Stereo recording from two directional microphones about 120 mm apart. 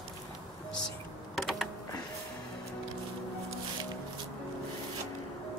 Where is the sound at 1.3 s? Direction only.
Centre (ahead or behind).